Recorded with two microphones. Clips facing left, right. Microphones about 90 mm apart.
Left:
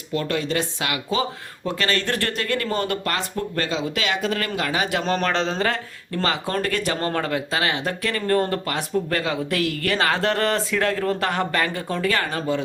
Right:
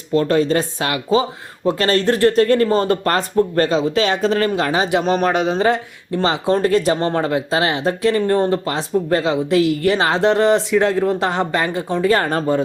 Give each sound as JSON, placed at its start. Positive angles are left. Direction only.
{"t": 0.1, "sound": "speech", "side_deg": -35}
{"t": 12.0, "sound": "speech", "side_deg": -40}